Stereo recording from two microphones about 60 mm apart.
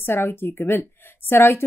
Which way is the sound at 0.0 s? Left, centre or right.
Left.